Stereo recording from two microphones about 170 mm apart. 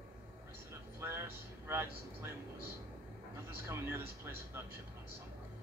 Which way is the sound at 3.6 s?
15° right (ahead or behind).